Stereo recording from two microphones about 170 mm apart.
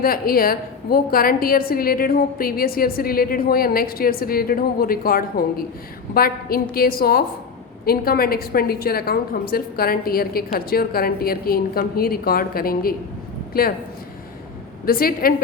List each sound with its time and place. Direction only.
0.0 s a woman's voice: 60° left (ahead or behind)
14.8 s a woman's voice: 60° left (ahead or behind)